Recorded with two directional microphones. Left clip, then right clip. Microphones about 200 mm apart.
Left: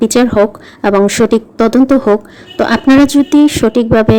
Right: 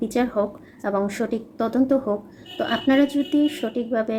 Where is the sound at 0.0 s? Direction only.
40° left (ahead or behind).